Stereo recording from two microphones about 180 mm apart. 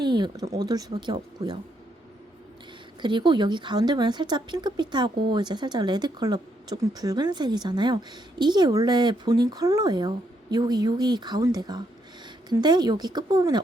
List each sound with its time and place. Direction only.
0.0 s a woman's voice: 25° right (ahead or behind)
3.0 s a woman's voice: 25° right (ahead or behind)